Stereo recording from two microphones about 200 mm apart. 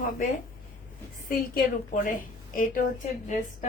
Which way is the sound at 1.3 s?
45° left (ahead or behind).